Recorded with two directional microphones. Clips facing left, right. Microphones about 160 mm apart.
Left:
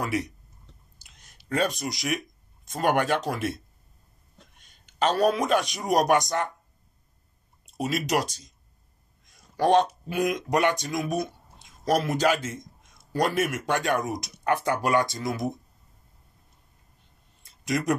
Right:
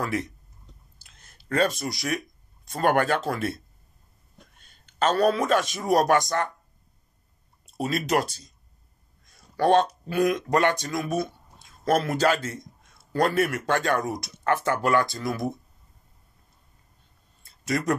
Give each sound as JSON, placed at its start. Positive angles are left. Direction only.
{"t": 0.0, "sound": "speech", "side_deg": 15}
{"t": 0.9, "sound": "a sound", "side_deg": 15}
{"t": 2.7, "sound": "speech", "side_deg": 15}
{"t": 4.6, "sound": "speech", "side_deg": 15}
{"t": 7.8, "sound": "speech", "side_deg": 15}
{"t": 9.2, "sound": "a sound", "side_deg": 20}
{"t": 10.0, "sound": "speech", "side_deg": 15}